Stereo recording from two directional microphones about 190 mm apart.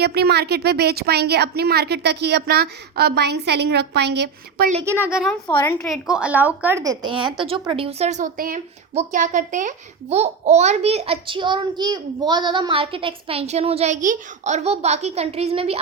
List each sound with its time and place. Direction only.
0.0 s a woman's voice: 60° right (ahead or behind)
4.9 s a woman's voice: 10° right (ahead or behind)
5.3 s a woman's voice: 10° left (ahead or behind)
5.9 s a woman's voice: 5° right (ahead or behind); by 15.8 s 30° right (ahead or behind)